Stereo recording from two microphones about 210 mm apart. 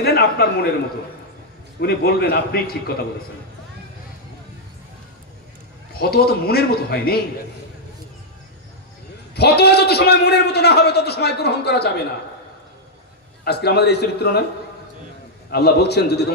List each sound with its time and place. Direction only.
0.0 s a man's voice: 50° left (ahead or behind)
1.8 s a man's voice: 50° left (ahead or behind)
5.9 s a man's voice: 45° left (ahead or behind)
9.3 s a man's voice: 50° left (ahead or behind)
13.4 s a man's voice: 50° left (ahead or behind)
15.5 s a man's voice: 50° left (ahead or behind)